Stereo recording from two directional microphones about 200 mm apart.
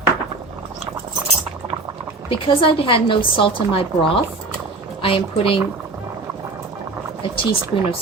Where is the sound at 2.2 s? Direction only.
25° left (ahead or behind).